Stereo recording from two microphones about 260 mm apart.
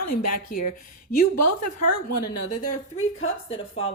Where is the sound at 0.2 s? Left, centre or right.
Left.